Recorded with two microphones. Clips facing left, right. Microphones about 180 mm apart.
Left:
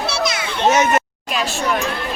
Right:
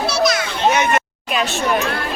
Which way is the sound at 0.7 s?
40° left (ahead or behind).